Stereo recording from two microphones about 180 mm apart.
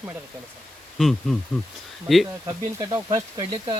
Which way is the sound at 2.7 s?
15° right (ahead or behind).